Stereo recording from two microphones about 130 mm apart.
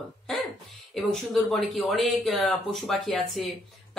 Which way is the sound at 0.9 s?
Centre (ahead or behind).